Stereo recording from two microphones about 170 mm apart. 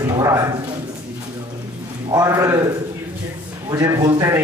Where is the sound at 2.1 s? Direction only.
20° right (ahead or behind).